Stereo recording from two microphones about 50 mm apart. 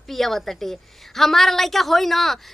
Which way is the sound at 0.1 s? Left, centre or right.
Centre.